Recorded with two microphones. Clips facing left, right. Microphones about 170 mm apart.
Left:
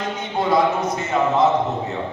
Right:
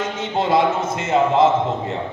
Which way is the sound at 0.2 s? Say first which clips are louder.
Right 1 dB; 25° right (ahead or behind).